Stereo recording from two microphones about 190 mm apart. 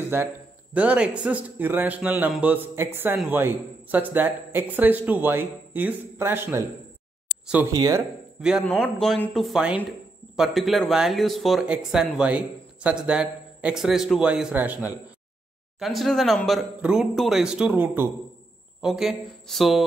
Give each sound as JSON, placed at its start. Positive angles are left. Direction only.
{"t": 0.1, "sound": "a man's voice", "side_deg": -15}
{"t": 7.7, "sound": "speech", "side_deg": -20}
{"t": 8.4, "sound": "a man's voice", "side_deg": -5}